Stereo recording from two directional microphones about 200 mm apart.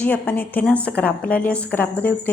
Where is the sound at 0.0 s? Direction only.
10° left (ahead or behind).